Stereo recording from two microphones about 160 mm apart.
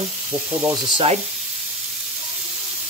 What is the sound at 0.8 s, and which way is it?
Speech, 30° right (ahead or behind).